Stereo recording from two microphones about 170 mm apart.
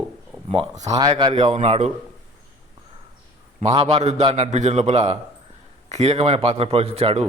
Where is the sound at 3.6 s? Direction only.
40° right (ahead or behind).